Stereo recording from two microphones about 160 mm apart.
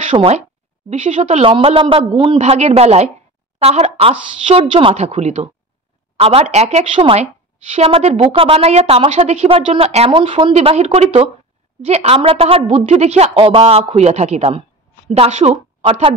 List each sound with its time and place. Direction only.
0.0 s a woman's voice: 35° right (ahead or behind)